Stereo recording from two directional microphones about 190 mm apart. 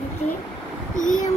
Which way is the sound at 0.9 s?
45° left (ahead or behind).